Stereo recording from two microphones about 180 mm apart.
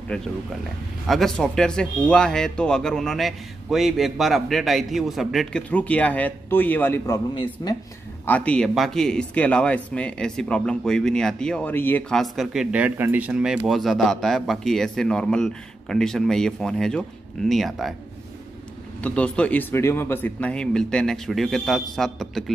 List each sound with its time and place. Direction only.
1.0 s speech: centre (ahead or behind)
7.6 s speech: 20° left (ahead or behind)
8.3 s speech: 5° left (ahead or behind)
18.9 s speech: 5° left (ahead or behind)